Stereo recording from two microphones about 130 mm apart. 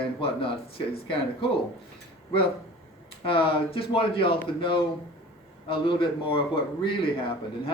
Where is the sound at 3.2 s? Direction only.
40° left (ahead or behind).